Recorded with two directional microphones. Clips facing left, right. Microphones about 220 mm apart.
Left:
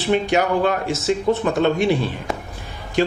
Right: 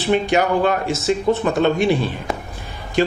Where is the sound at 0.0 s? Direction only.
15° right (ahead or behind).